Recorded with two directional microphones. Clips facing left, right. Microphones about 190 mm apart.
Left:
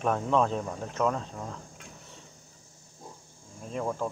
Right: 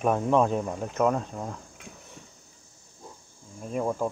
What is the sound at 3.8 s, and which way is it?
Speech, 15° right (ahead or behind).